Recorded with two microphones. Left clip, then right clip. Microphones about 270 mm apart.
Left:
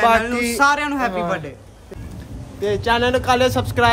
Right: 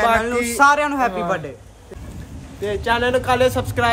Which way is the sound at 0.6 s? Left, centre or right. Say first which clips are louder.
Right 3 dB; centre.